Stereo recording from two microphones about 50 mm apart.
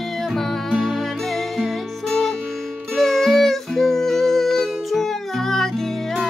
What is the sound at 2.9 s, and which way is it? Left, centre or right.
Music, centre.